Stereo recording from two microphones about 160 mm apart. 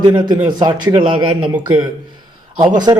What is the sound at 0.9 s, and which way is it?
Speech, 30° right (ahead or behind).